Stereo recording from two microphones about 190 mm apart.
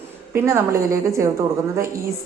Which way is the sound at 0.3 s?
15° right (ahead or behind).